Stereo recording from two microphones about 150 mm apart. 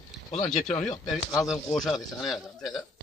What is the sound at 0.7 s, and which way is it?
Speech, 55° left (ahead or behind).